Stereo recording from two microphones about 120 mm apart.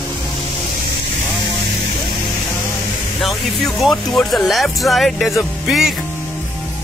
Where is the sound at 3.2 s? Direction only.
Centre (ahead or behind).